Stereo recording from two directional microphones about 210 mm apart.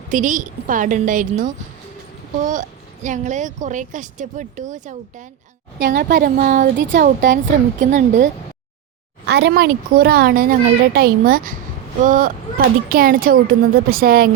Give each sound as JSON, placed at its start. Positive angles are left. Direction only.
{"t": 0.1, "sound": "speech", "side_deg": -40}
{"t": 9.2, "sound": "speech", "side_deg": -50}